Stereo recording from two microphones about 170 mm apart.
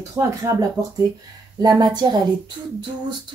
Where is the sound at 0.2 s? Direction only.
20° right (ahead or behind).